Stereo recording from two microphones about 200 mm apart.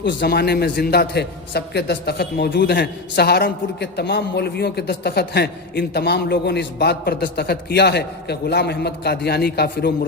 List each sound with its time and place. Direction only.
0.0 s a man's voice: 55° left (ahead or behind)